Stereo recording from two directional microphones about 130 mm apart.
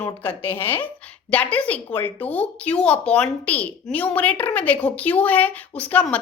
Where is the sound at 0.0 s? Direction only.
15° left (ahead or behind).